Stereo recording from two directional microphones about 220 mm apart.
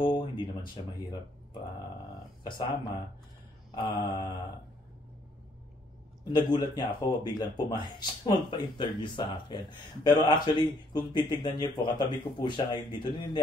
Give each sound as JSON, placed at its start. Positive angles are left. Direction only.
{"t": 0.0, "sound": "speech", "side_deg": 20}
{"t": 2.4, "sound": "speech", "side_deg": 20}
{"t": 3.7, "sound": "mantra", "side_deg": 20}
{"t": 6.2, "sound": "speech", "side_deg": 20}